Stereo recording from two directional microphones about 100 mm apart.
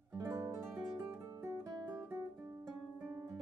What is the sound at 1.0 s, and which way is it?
Guitar, 30° right (ahead or behind).